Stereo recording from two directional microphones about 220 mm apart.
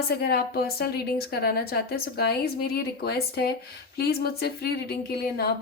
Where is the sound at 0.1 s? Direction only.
45° left (ahead or behind).